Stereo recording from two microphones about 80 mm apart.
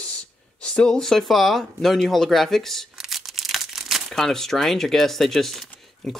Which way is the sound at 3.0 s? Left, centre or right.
Centre.